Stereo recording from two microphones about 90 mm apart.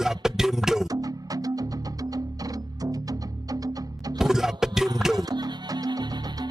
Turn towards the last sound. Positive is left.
turn(degrees=-50)  # may be behind; listen again after turning